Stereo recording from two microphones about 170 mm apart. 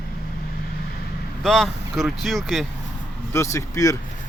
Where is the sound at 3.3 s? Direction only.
15° left (ahead or behind).